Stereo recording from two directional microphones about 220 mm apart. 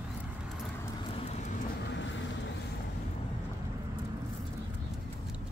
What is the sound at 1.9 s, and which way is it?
Vehicle, 55° left (ahead or behind).